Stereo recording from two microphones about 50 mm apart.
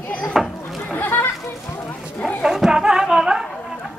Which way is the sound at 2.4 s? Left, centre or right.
Centre.